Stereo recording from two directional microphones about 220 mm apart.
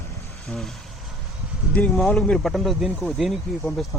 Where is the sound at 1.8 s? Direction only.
Centre (ahead or behind).